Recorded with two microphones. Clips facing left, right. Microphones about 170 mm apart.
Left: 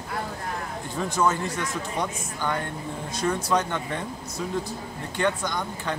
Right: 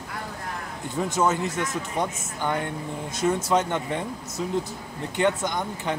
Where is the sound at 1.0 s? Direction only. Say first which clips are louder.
Right 1 dB; 20° right (ahead or behind).